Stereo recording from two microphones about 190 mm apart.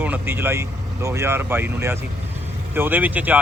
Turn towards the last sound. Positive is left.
turn(degrees=-10)  # may be behind; listen again after turning